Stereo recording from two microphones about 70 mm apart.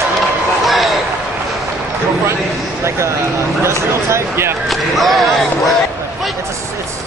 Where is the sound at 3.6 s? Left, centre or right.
Right.